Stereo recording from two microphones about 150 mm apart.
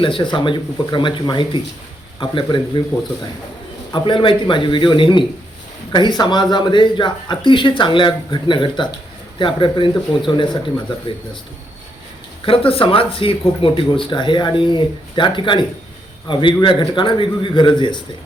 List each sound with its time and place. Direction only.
0.0 s speech: 35° left (ahead or behind)
3.9 s speech: 35° left (ahead or behind)
12.5 s speech: 40° left (ahead or behind)